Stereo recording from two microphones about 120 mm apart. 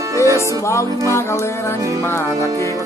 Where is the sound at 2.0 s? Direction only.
25° left (ahead or behind).